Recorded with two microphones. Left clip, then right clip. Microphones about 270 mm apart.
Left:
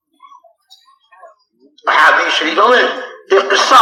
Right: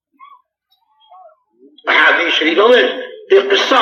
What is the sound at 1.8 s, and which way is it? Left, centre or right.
Speech, left.